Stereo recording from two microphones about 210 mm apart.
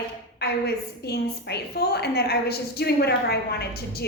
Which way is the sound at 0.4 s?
50° left (ahead or behind).